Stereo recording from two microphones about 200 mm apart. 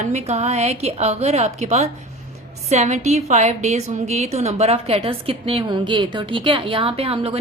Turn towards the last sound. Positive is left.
turn(degrees=-30)  # may be behind; listen again after turning